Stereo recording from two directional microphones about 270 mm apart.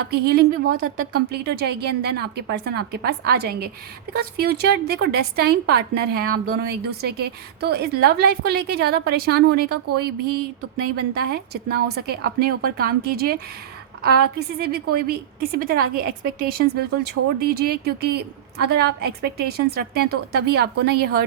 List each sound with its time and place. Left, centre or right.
0.1 s a woman's voice: right